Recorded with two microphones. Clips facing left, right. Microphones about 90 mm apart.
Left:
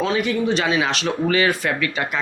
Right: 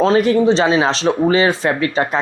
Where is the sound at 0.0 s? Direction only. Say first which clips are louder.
Right 8 dB; 35° right (ahead or behind).